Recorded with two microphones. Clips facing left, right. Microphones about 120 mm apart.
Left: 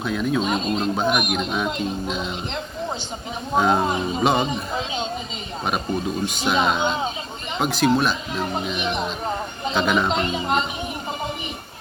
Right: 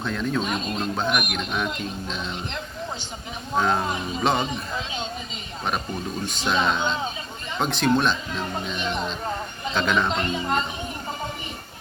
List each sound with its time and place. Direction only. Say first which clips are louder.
0.0 s speech: left 3 dB; 10° left (ahead or behind)
0.4 s speech: left 4 dB; 20° left (ahead or behind)
0.9 s speech: left 4 dB; 10° left (ahead or behind)
3.5 s speech: left 4 dB; 15° left (ahead or behind)
4.2 s speech: left 3 dB; 10° left (ahead or behind)
4.4 s a man's voice: left 4 dB; 25° left (ahead or behind)
6.2 s speech: left 1 dB; 10° left (ahead or behind)